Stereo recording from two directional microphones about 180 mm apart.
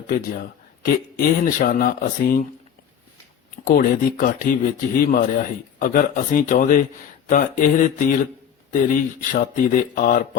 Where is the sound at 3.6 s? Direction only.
50° left (ahead or behind).